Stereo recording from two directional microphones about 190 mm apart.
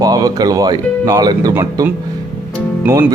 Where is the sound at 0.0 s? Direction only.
20° right (ahead or behind).